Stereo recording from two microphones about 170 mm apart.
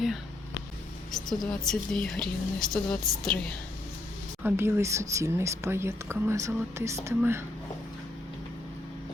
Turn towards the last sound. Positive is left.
turn(degrees=-15)  # may be behind; listen again after turning